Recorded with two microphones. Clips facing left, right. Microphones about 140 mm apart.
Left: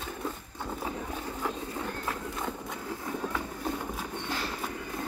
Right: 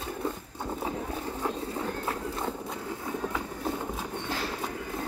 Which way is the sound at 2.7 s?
20° right (ahead or behind).